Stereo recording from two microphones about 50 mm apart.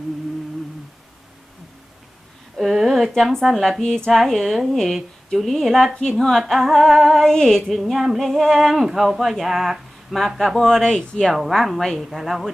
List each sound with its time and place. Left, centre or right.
2.6 s speech: centre
5.9 s a woman's voice: centre
6.1 s speech: centre
7.7 s speech: centre
11.3 s speech: centre